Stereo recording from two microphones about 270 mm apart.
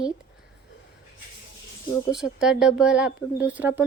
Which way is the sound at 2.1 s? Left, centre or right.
Centre.